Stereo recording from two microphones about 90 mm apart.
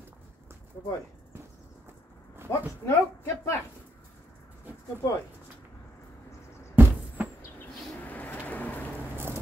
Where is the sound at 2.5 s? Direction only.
35° left (ahead or behind).